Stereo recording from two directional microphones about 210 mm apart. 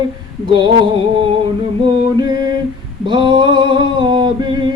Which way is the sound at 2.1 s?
20° right (ahead or behind).